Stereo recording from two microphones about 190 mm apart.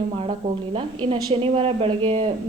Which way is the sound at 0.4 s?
30° right (ahead or behind).